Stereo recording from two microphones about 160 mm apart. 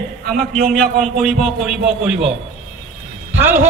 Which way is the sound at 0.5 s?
5° left (ahead or behind).